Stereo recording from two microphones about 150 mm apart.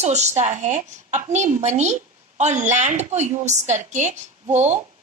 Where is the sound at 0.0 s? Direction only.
50° right (ahead or behind).